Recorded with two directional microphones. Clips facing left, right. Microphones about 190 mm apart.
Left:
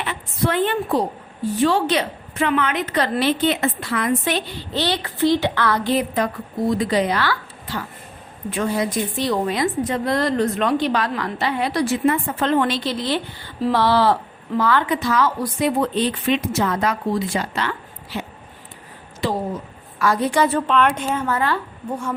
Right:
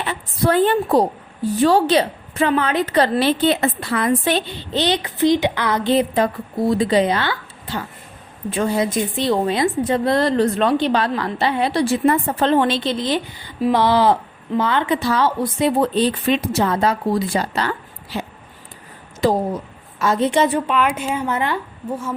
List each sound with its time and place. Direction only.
0.1 s a woman's voice: 35° right (ahead or behind); by 14.9 s 20° right (ahead or behind)
14.9 s a woman's voice: 30° right (ahead or behind)
20.0 s a woman's voice: 25° right (ahead or behind)
20.7 s a woman's voice: 10° right (ahead or behind)